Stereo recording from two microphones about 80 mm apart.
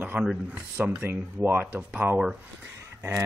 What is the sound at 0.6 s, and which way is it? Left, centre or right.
Speech, right.